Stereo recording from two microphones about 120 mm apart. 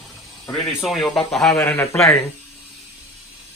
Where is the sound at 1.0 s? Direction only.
Centre (ahead or behind).